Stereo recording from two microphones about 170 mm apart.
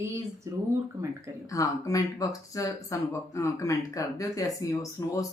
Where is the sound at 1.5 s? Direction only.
20° left (ahead or behind).